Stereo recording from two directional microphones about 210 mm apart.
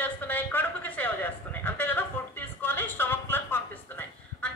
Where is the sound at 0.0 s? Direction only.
10° left (ahead or behind).